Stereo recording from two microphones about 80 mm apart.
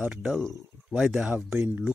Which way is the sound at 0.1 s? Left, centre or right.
Centre.